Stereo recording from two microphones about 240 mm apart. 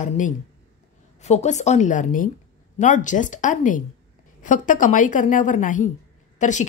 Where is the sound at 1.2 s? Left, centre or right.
Left.